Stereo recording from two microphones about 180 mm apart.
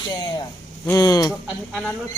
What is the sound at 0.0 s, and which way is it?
Speech, 25° left (ahead or behind).